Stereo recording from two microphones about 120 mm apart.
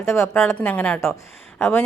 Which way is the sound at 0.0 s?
20° left (ahead or behind).